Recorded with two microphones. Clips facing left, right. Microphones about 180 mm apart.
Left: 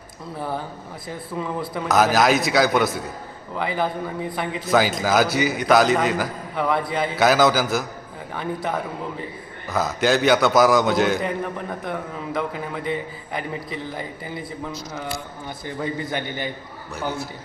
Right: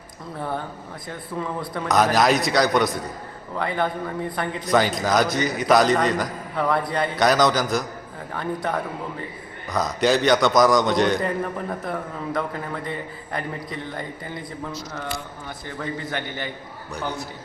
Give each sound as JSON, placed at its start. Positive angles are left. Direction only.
{"t": 0.3, "sound": "a man's voice", "side_deg": 5}
{"t": 15.8, "sound": "a man's voice", "side_deg": 15}
{"t": 16.9, "sound": "a man's voice", "side_deg": 0}